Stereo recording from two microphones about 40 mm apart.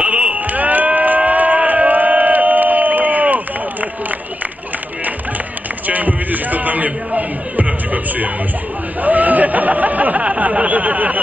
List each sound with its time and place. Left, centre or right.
0.0 s a sound: right
5.9 s music: right
9.0 s snicker: right